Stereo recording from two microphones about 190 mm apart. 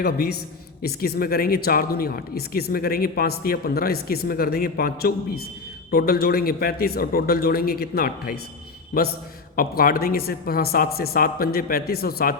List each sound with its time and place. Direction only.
0.0 s a woman's voice: 55° left (ahead or behind)